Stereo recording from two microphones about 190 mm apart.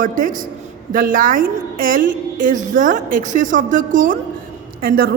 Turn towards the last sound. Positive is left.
turn(degrees=-50)  # may be behind; listen again after turning